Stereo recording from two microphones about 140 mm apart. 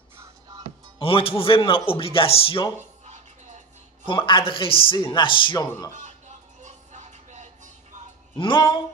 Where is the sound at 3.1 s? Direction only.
55° right (ahead or behind).